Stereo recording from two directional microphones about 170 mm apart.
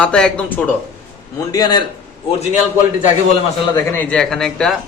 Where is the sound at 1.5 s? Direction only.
25° left (ahead or behind).